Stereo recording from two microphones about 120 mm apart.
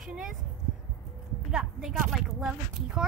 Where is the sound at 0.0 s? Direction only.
5° right (ahead or behind).